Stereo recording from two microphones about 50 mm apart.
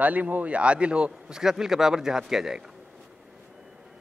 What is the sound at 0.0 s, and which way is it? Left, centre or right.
A man's voice, right.